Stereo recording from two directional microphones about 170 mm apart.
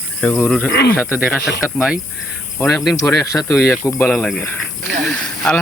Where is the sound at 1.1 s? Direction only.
10° right (ahead or behind).